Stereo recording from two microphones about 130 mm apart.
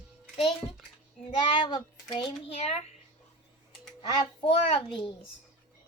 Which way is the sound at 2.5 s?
50° left (ahead or behind).